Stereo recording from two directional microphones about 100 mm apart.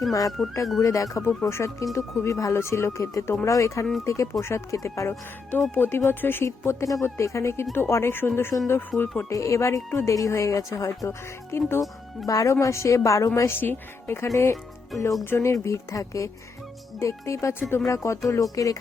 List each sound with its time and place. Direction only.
0.1 s speech: 35° left (ahead or behind)